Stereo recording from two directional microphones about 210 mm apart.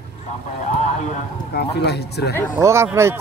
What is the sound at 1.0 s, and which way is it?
Speech, 50° left (ahead or behind).